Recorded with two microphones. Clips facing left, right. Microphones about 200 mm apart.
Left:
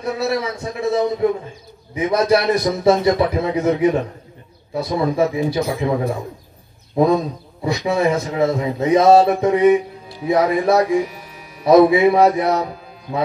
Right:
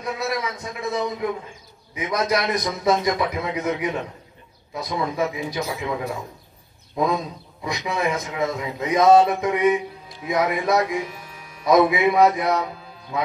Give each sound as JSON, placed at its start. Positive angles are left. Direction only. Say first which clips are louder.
{"t": 0.0, "sound": "a man's voice", "louder": "left 6 dB", "side_deg": 30}